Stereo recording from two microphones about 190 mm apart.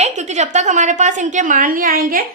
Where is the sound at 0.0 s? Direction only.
35° right (ahead or behind).